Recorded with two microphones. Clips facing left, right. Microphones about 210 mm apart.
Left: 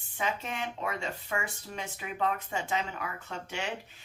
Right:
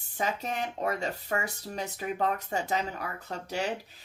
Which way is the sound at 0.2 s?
40° right (ahead or behind).